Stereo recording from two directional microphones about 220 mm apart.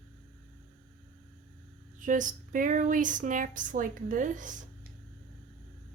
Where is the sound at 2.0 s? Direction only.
35° right (ahead or behind).